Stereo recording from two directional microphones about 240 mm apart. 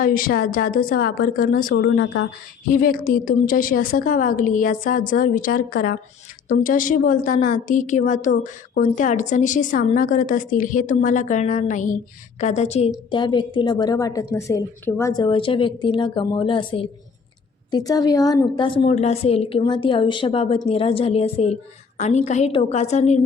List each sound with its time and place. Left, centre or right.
0.0 s a woman's voice: left
2.6 s a woman's voice: left